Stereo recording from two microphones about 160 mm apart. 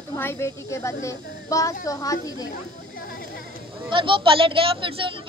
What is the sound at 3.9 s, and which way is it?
Speech, 30° right (ahead or behind).